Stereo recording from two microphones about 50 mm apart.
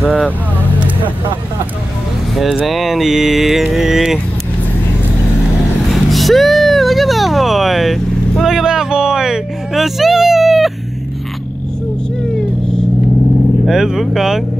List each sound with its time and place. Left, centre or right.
0.0 s speech: centre
2.3 s mantra: centre
6.0 s speech: centre
8.5 s speech: centre
13.7 s mantra: centre